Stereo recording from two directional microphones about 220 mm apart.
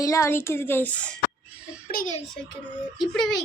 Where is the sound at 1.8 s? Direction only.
40° left (ahead or behind).